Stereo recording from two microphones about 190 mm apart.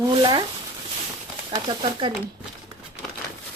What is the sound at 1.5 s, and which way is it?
Speech, 25° right (ahead or behind).